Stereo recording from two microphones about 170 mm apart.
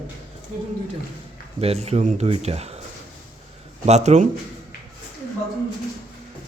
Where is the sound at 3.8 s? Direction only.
40° right (ahead or behind).